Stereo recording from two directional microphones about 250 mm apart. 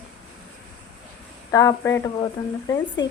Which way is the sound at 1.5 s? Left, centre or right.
Centre.